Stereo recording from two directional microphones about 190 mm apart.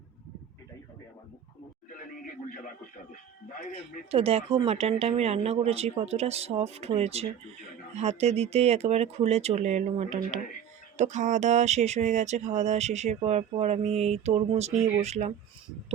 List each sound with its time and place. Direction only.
4.1 s speech: 30° right (ahead or behind)